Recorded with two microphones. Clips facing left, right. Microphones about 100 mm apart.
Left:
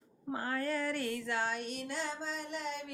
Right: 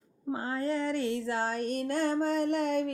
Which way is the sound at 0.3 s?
25° right (ahead or behind).